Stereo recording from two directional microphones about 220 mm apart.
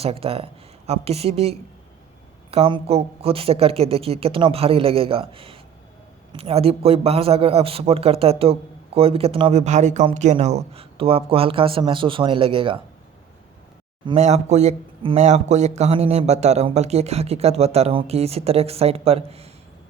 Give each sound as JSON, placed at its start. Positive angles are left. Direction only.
{"t": 0.0, "sound": "a man's voice", "side_deg": -25}
{"t": 14.0, "sound": "a man's voice", "side_deg": -25}